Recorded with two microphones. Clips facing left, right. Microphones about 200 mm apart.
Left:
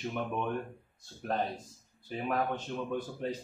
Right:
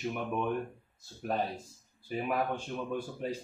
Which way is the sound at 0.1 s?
5° right (ahead or behind).